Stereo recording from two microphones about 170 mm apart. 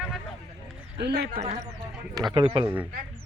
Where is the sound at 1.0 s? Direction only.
70° right (ahead or behind).